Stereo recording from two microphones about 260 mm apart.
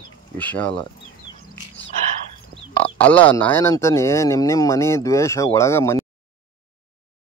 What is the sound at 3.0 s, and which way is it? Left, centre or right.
Speech, centre.